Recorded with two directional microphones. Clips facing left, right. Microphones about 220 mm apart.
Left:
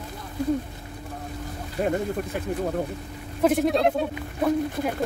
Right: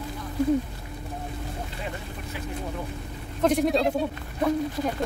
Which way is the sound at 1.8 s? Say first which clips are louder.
Left 11 dB; 50° left (ahead or behind).